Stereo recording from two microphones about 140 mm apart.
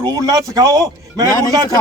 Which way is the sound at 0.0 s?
30° right (ahead or behind).